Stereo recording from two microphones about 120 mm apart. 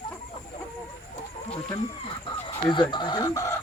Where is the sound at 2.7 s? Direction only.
40° left (ahead or behind).